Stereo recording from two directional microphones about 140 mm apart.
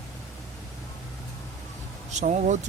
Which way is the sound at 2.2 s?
60° right (ahead or behind).